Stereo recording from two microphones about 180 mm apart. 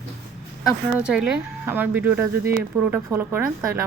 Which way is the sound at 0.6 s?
5° right (ahead or behind).